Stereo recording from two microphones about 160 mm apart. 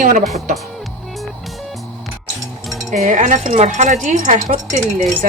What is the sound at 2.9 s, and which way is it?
Speech, 50° right (ahead or behind).